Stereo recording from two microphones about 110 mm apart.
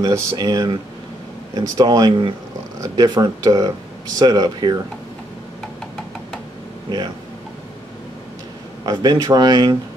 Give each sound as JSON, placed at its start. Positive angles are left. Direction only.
{"t": 0.0, "sound": "speech", "side_deg": -30}
{"t": 8.8, "sound": "speech", "side_deg": -35}